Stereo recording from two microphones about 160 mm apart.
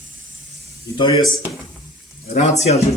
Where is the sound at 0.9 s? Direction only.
30° left (ahead or behind).